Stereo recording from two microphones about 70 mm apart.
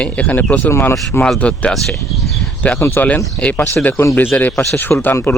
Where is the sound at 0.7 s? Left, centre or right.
Left.